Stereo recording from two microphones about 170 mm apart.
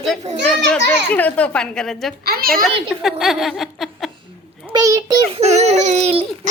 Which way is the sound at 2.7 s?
Centre (ahead or behind).